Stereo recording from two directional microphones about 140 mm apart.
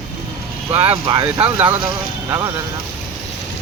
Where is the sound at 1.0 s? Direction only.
35° right (ahead or behind).